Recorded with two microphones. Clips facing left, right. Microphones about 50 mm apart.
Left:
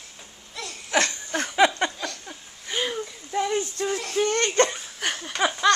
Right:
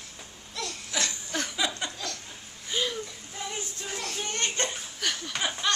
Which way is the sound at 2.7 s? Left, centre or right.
Left.